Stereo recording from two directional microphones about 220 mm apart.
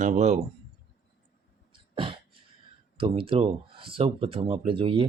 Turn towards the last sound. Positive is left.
turn(degrees=-25)  # may be behind; listen again after turning